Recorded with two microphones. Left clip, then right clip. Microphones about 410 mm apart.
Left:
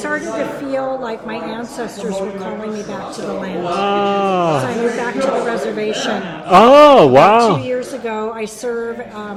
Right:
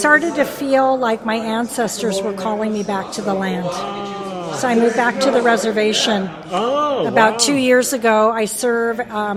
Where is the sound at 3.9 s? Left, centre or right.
Left.